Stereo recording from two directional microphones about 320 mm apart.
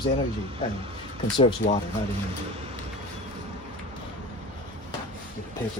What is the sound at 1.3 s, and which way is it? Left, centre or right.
Speech, left.